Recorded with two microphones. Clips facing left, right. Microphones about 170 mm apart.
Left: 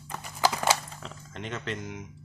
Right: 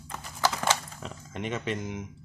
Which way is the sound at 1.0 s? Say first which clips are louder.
Right 4 dB; 10° right (ahead or behind).